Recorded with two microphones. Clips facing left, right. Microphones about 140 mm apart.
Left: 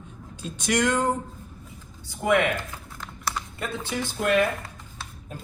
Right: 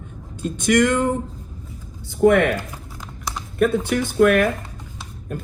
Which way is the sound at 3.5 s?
60° right (ahead or behind).